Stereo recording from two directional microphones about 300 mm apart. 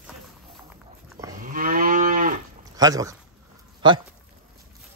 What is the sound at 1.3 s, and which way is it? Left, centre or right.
Moo, right.